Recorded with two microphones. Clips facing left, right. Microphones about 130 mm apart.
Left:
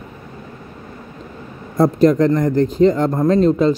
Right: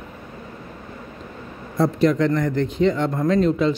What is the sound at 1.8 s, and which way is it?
Speech, 40° left (ahead or behind).